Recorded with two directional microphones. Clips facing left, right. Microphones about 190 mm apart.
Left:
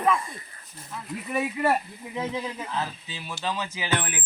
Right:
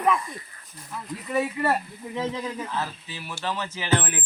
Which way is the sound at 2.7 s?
15° left (ahead or behind).